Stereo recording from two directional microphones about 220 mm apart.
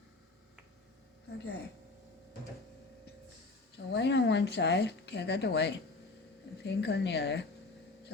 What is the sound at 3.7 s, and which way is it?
Speech, 50° left (ahead or behind).